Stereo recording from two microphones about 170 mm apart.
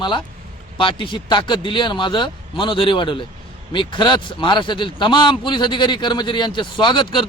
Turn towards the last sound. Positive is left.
turn(degrees=30)  # may be behind; listen again after turning